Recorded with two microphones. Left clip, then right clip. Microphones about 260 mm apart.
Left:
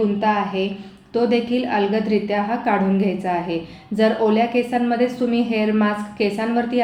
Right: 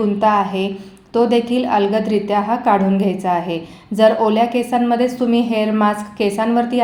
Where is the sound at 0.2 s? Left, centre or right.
Right.